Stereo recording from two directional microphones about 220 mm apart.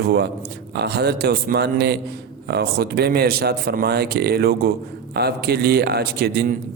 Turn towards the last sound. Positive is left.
turn(degrees=-45)  # may be behind; listen again after turning